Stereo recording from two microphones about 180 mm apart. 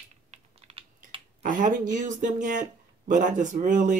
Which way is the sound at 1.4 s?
45° right (ahead or behind).